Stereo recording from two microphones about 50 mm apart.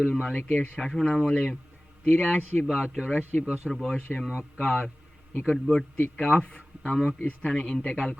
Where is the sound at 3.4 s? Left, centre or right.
Centre.